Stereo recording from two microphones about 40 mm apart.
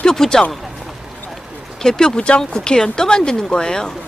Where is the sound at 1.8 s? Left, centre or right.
Centre.